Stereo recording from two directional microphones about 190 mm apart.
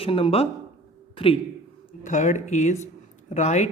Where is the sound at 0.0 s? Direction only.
30° left (ahead or behind).